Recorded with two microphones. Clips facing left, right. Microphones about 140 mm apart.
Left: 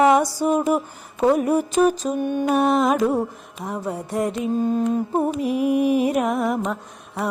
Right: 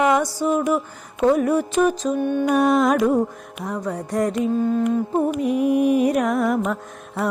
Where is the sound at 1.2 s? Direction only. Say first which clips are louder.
Even; 15° left (ahead or behind).